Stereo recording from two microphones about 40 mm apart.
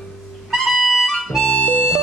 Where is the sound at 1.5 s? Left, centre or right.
Left.